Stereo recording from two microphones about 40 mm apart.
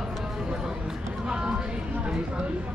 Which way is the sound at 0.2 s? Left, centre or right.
Centre.